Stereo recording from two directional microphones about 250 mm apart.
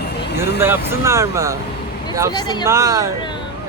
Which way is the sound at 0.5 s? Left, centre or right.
Centre.